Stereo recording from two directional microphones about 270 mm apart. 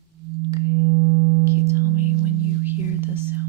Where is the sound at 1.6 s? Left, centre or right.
Centre.